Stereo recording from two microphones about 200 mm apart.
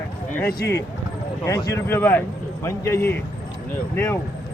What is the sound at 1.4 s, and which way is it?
A man's voice, 15° left (ahead or behind).